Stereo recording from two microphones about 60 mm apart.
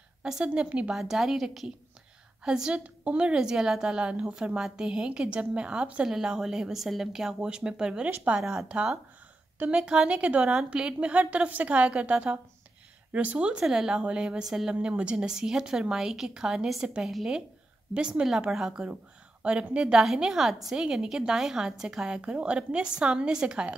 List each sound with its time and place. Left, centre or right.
0.2 s a woman's voice: centre
0.9 s a woman's voice: centre
8.6 s a woman's voice: centre
17.9 s a woman's voice: centre
18.5 s a woman's voice: centre
19.4 s a woman's voice: centre
20.0 s a woman's voice: centre